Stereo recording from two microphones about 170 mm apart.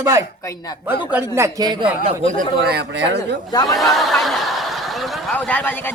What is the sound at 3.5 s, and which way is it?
Speech, 25° left (ahead or behind).